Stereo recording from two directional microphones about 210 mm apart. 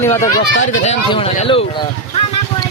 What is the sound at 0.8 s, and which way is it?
Speech, 30° left (ahead or behind).